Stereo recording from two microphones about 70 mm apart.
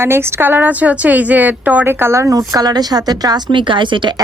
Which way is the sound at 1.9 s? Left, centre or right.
Right.